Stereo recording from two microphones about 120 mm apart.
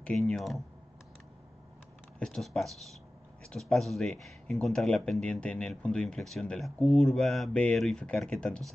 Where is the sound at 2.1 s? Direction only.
5° left (ahead or behind).